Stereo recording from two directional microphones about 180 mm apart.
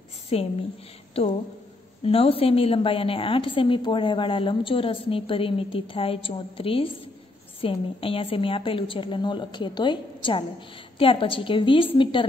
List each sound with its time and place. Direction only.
0.3 s a woman's voice: 35° left (ahead or behind)